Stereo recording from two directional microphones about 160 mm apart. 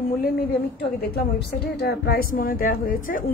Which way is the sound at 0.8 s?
85° left.